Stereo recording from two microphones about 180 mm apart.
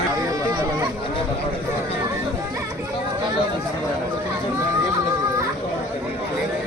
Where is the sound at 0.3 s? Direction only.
20° right (ahead or behind).